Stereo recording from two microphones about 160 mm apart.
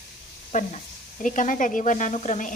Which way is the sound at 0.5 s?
55° left (ahead or behind).